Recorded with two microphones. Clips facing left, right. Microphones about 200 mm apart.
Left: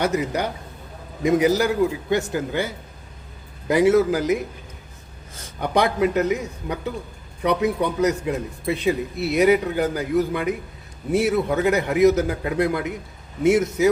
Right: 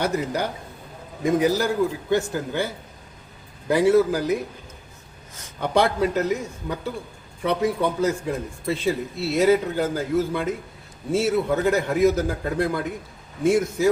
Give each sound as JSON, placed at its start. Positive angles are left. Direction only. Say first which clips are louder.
{"t": 0.1, "sound": "a man's voice", "louder": "left 1 dB", "side_deg": 15}
{"t": 5.7, "sound": "a man's voice", "louder": "left 1 dB", "side_deg": 15}